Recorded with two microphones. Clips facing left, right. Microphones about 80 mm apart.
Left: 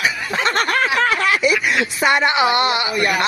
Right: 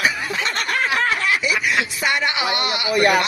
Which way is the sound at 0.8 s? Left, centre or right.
Left.